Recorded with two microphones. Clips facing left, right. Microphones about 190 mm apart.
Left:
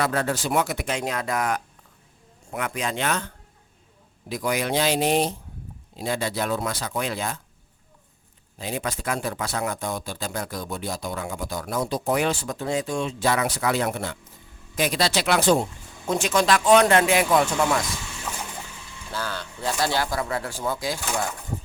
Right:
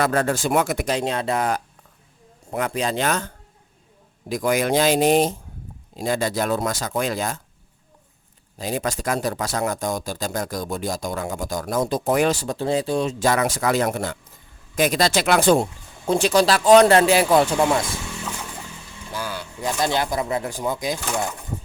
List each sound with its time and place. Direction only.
0.0 s speech: 45° right (ahead or behind)
0.9 s speech: 30° right (ahead or behind)
8.5 s speech: 40° right (ahead or behind)
16.0 s speech: 35° right (ahead or behind)
19.1 s speech: 10° right (ahead or behind)